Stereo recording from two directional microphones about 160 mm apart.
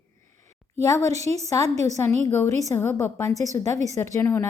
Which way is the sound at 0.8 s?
20° left (ahead or behind).